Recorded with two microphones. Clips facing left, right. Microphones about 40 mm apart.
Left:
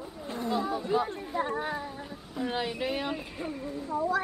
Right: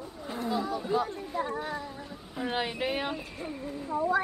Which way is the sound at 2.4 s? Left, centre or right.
Centre.